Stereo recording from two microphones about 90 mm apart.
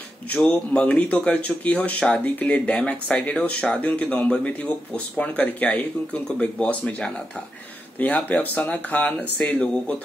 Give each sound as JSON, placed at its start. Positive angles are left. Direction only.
{"t": 0.3, "sound": "speech", "side_deg": 15}